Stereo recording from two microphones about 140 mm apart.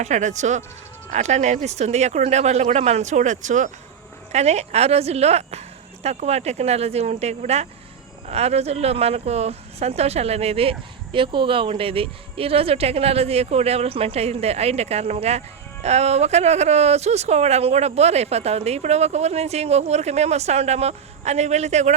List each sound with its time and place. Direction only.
0.0 s speech: 60° right (ahead or behind)
4.3 s speech: 50° right (ahead or behind)